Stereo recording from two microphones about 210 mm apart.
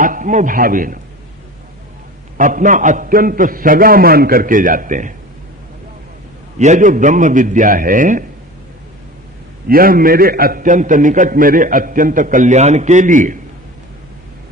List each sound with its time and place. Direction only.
0.0 s a man's voice: 40° right (ahead or behind)
2.4 s a man's voice: 40° right (ahead or behind)
6.6 s a man's voice: 35° right (ahead or behind)
9.6 s a man's voice: 45° right (ahead or behind)